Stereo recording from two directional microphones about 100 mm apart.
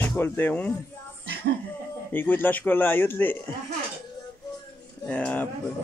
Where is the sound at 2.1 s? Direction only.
20° left (ahead or behind).